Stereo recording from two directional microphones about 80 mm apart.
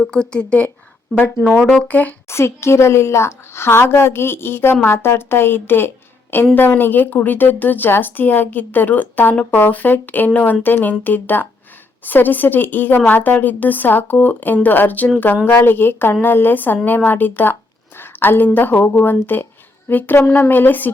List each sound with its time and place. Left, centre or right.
0.0 s speech: centre
1.9 s a woman's voice: centre
2.3 s a woman's voice: left
20.1 s a woman's voice: left
20.4 s a woman's voice: left